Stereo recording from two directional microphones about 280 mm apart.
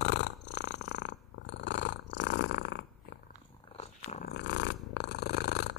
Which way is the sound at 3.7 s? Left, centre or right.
Left.